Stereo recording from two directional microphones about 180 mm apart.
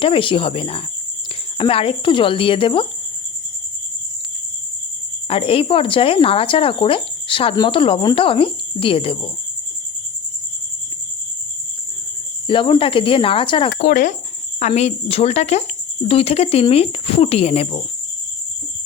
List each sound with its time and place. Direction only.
0.0 s speech: 30° left (ahead or behind)
5.3 s speech: 30° left (ahead or behind)
12.5 s speech: 25° left (ahead or behind)
13.7 s speech: 45° left (ahead or behind)